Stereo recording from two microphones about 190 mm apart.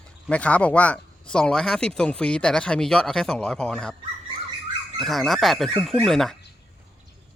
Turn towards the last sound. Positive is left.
turn(degrees=0)  # may be behind; listen again after turning